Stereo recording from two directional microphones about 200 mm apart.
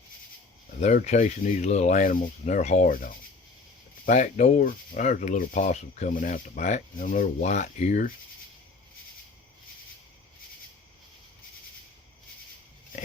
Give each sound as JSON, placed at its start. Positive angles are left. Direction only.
{"t": 0.8, "sound": "speech", "side_deg": 35}